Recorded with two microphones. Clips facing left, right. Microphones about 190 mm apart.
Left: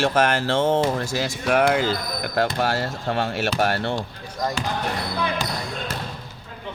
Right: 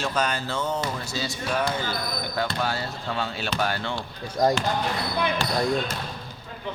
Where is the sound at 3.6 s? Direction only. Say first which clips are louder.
Left 4 dB; 70° left (ahead or behind).